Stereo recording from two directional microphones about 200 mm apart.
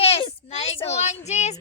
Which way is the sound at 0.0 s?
25° left (ahead or behind).